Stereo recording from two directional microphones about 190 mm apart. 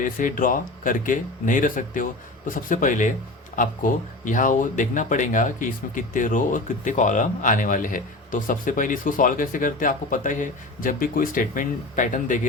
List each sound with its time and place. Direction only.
0.0 s speech: 45° left (ahead or behind)